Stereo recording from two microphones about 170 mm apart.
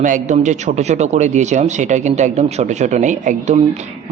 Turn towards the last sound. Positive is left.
turn(degrees=-45)  # may be behind; listen again after turning